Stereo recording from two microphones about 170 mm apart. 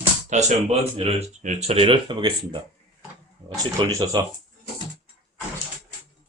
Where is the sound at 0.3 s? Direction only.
40° right (ahead or behind).